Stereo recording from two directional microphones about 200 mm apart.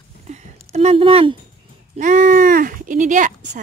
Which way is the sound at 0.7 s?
30° right (ahead or behind).